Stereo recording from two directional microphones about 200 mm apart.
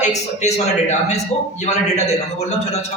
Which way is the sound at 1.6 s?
35° left (ahead or behind).